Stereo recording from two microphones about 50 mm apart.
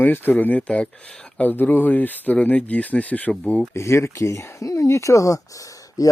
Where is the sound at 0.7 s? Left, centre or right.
Left.